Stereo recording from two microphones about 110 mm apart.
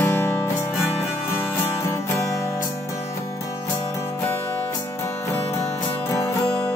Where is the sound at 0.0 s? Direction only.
20° left (ahead or behind).